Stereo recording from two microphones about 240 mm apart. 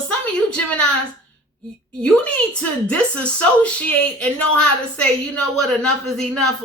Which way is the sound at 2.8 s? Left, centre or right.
Centre.